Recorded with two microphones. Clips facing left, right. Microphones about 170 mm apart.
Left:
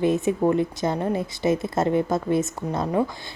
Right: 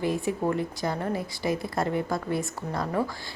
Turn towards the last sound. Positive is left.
turn(degrees=20)  # may be behind; listen again after turning